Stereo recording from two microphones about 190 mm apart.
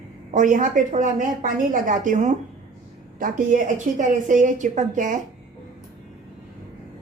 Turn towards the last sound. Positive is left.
turn(degrees=-40)  # may be behind; listen again after turning